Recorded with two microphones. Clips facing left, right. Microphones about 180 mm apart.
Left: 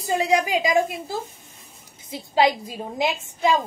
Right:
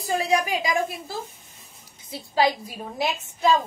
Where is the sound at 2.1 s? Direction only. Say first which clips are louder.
Left 2 dB; 20° left (ahead or behind).